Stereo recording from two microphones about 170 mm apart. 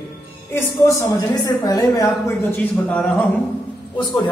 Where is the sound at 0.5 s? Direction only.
15° left (ahead or behind).